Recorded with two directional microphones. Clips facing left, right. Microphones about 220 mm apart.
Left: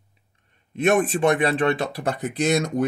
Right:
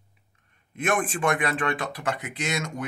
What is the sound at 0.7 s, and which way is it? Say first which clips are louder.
Speech: left 7 dB; 25° left (ahead or behind).